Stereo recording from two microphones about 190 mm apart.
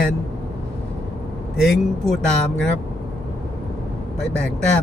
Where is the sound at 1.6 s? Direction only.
Centre (ahead or behind).